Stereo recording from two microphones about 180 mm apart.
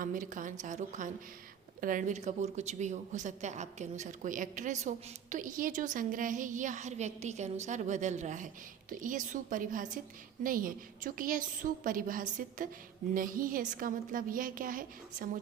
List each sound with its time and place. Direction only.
0.0 s a woman's voice: 50° right (ahead or behind)